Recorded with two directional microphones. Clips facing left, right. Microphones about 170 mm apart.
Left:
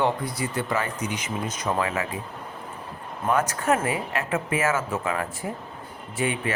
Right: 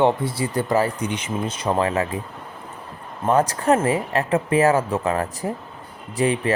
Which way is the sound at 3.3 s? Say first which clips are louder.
Right 5 dB; 35° right (ahead or behind).